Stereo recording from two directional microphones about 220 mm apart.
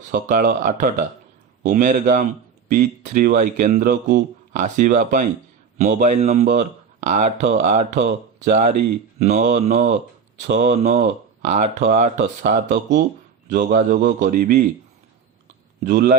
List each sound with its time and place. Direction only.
0.1 s speech: 40° right (ahead or behind)
15.8 s speech: 35° right (ahead or behind)